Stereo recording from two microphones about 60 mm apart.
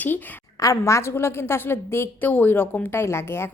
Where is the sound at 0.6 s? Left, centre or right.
Left.